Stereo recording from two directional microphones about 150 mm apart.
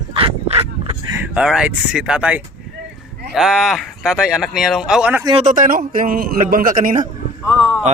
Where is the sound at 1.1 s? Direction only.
5° right (ahead or behind).